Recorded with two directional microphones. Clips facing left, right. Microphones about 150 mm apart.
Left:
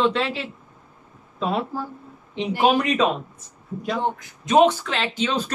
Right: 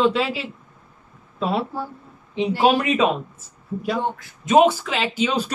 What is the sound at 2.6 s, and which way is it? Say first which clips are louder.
Speech: right 1 dB; 5° right (ahead or behind).